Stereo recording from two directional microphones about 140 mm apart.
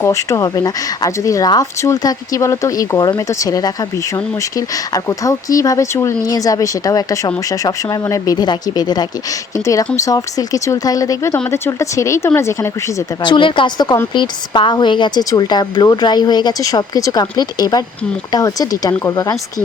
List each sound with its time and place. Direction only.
0.0 s a woman's voice: 20° left (ahead or behind)
5.0 s a woman's voice: 25° left (ahead or behind)
13.2 s a woman's voice: 35° left (ahead or behind)